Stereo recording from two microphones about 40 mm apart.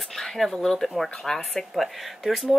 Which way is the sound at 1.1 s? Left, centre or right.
Centre.